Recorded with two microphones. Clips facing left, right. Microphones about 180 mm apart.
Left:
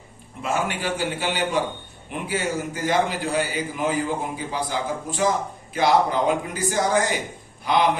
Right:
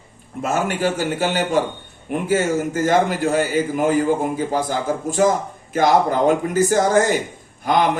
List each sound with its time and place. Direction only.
0.4 s a man's voice: 45° right (ahead or behind)